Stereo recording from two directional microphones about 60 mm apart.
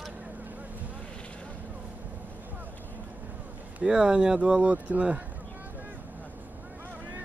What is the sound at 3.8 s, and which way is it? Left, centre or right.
Speech, centre.